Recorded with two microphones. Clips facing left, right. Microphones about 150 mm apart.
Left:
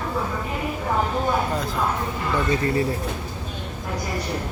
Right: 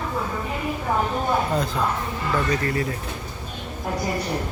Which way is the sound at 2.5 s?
25° left (ahead or behind).